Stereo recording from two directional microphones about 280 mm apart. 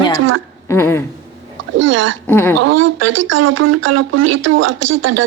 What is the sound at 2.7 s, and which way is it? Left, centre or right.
Speech, right.